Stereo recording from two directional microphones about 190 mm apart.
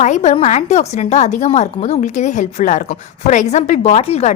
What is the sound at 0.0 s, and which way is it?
A woman's voice, 40° left (ahead or behind).